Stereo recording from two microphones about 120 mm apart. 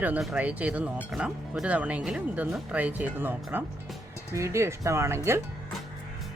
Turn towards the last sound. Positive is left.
turn(degrees=-25)  # may be behind; listen again after turning